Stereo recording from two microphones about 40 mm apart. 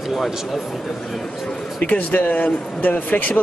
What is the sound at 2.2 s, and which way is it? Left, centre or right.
Speech, left.